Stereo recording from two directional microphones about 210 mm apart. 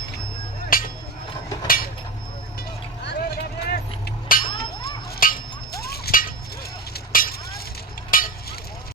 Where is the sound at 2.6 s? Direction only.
50° left (ahead or behind).